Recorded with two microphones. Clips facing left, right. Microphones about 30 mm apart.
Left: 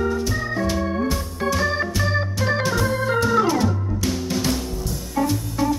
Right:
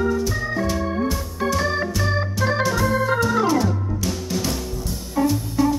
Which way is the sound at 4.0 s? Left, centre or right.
Centre.